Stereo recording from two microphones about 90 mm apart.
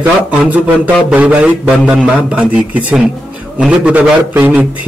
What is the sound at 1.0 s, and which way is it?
A man's voice, 15° right (ahead or behind).